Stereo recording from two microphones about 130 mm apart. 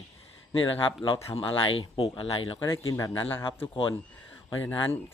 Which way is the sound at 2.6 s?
20° left (ahead or behind).